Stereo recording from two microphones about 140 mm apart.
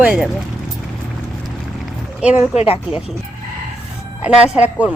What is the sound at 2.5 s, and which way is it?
Speech, 40° left (ahead or behind).